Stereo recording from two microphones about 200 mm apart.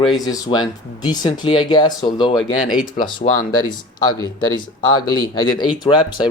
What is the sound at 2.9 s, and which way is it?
Speech, 45° left (ahead or behind).